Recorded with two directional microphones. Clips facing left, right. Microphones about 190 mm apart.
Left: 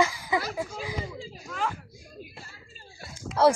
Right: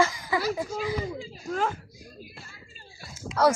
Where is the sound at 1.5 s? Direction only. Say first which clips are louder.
Right 4 dB; 40° right (ahead or behind).